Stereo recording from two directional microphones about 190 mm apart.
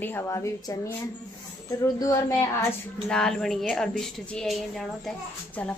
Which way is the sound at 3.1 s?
5° left (ahead or behind).